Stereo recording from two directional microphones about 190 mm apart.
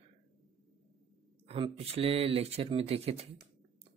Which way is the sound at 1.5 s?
30° right (ahead or behind).